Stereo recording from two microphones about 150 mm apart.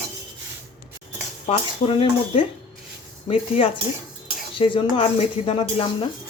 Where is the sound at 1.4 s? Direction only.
40° left (ahead or behind).